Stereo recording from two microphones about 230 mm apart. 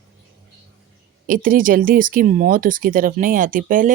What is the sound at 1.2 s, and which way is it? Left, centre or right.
Speech, right.